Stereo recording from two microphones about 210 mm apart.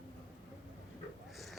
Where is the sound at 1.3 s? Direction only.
Centre (ahead or behind).